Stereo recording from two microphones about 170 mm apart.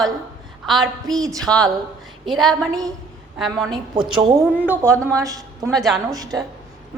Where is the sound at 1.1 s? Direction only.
20° right (ahead or behind).